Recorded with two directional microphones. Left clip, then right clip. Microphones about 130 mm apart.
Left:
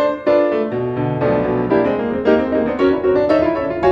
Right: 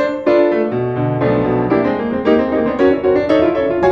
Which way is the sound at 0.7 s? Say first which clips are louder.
Right 2 dB; 15° left (ahead or behind).